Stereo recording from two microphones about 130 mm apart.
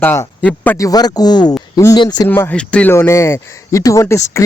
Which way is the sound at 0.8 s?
30° left (ahead or behind).